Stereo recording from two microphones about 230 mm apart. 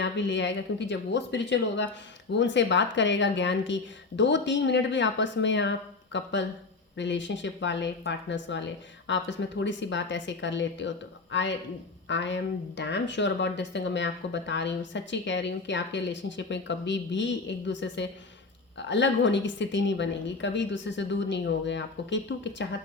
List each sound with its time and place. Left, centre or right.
0.0 s speech: left